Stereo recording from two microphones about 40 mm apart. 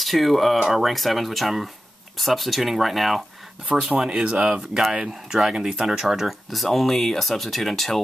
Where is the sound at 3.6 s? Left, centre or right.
Right.